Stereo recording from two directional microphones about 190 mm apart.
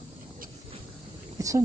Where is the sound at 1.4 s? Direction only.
15° right (ahead or behind).